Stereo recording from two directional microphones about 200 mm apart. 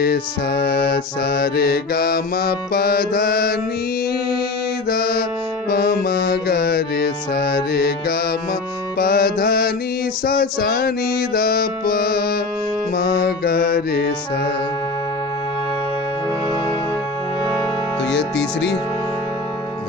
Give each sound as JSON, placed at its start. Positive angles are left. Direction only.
{"t": 0.0, "sound": "mantra", "side_deg": 50}
{"t": 4.8, "sound": "music", "side_deg": 50}
{"t": 10.2, "sound": "mantra", "side_deg": 50}
{"t": 12.9, "sound": "music", "side_deg": 50}
{"t": 18.1, "sound": "speech", "side_deg": 60}